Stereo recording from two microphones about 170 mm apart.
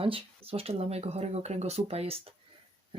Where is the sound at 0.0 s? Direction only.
35° right (ahead or behind).